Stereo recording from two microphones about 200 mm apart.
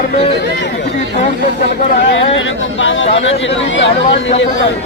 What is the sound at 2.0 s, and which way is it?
Speech, 70° left (ahead or behind).